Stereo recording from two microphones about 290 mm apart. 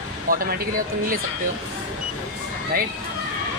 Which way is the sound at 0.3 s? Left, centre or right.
Right.